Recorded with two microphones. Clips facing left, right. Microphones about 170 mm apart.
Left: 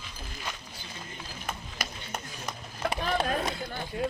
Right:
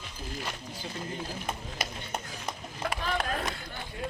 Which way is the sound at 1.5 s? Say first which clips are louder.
Right 2 dB; 25° right (ahead or behind).